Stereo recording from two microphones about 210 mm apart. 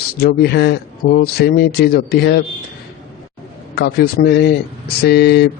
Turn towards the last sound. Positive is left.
turn(degrees=50)  # may be behind; listen again after turning